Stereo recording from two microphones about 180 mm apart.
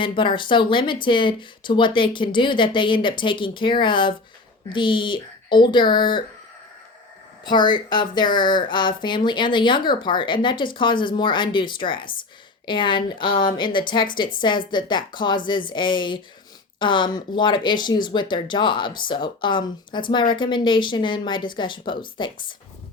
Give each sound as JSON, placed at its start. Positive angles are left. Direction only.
{"t": 0.0, "sound": "speech", "side_deg": 30}
{"t": 7.4, "sound": "speech", "side_deg": 25}